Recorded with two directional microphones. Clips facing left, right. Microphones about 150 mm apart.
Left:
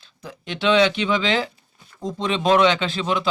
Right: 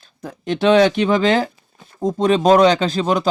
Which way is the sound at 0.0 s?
45° right (ahead or behind).